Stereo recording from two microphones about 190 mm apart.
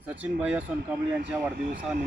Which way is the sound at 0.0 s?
10° right (ahead or behind).